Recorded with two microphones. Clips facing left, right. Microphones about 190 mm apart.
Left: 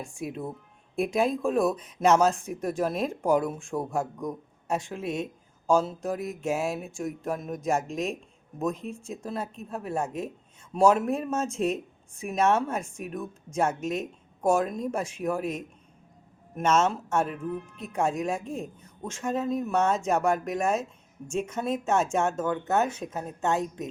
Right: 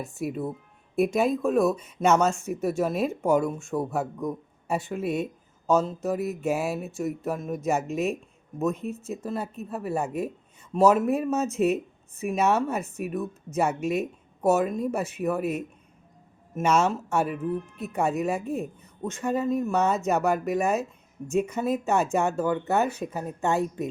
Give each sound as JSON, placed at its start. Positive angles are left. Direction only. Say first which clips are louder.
{"t": 0.0, "sound": "speech", "louder": "right 4 dB", "side_deg": -5}
{"t": 22.9, "sound": "speech", "louder": "right 3 dB", "side_deg": -60}
{"t": 23.1, "sound": "speech", "louder": "right 1 dB", "side_deg": -5}